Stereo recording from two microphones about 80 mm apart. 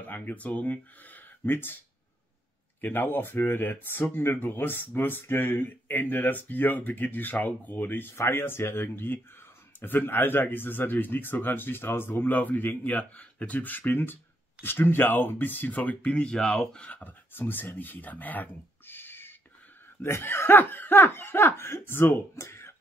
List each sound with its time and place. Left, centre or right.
0.0 s speech: left
2.8 s speech: left